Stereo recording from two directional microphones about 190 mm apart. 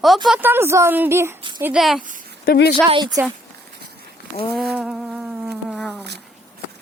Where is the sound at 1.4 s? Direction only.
25° right (ahead or behind).